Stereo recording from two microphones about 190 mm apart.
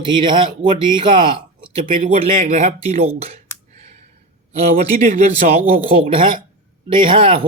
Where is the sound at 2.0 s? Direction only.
40° right (ahead or behind).